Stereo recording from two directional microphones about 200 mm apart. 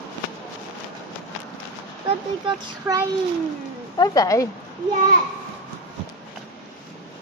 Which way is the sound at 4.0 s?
15° left (ahead or behind).